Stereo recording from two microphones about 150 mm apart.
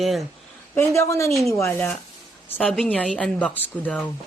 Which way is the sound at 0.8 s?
20° left (ahead or behind).